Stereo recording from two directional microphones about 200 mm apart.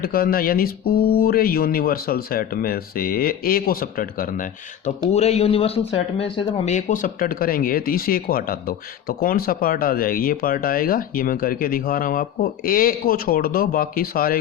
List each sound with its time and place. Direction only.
0.0 s speech: 50° left (ahead or behind)
5.1 s speech: 30° left (ahead or behind)